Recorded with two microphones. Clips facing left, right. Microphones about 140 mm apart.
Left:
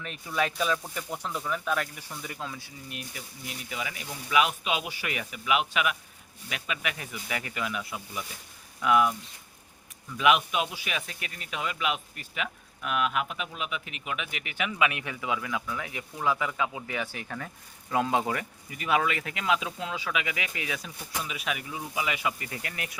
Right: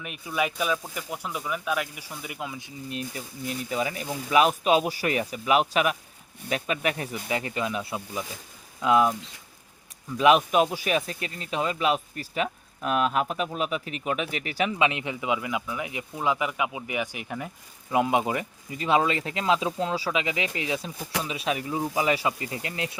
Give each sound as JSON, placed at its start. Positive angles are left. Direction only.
{"t": 0.0, "sound": "speech", "side_deg": -10}
{"t": 3.2, "sound": "speech", "side_deg": -40}
{"t": 10.2, "sound": "speech", "side_deg": -35}